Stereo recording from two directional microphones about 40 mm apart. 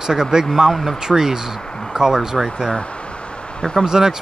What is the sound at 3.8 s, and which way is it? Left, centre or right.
Speech, centre.